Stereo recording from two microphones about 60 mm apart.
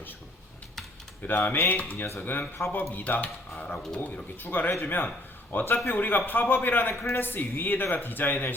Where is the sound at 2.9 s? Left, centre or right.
Left.